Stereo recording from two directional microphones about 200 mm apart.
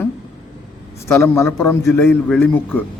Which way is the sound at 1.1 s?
15° left (ahead or behind).